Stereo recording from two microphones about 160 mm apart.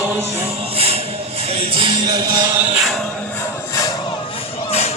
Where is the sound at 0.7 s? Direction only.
40° right (ahead or behind); by 2.5 s 25° right (ahead or behind).